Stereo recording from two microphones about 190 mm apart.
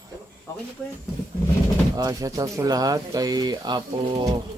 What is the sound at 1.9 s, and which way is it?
Speech, 20° right (ahead or behind).